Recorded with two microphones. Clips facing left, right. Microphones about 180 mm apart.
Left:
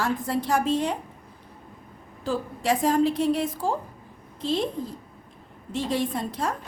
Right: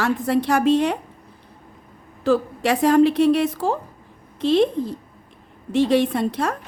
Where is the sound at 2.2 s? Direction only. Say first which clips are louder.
Right 6 dB; 70° right (ahead or behind).